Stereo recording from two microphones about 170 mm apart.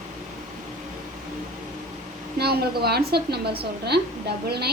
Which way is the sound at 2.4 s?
70° right (ahead or behind).